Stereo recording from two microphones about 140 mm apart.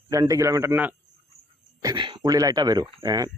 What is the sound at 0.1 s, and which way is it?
Speech, 25° right (ahead or behind).